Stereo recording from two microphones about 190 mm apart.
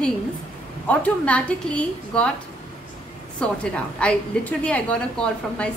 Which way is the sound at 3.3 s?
5° left (ahead or behind).